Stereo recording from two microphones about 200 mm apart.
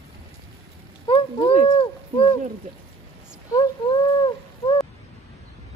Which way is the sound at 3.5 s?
20° left (ahead or behind).